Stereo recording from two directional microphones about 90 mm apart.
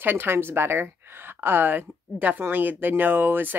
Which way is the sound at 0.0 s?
25° right (ahead or behind).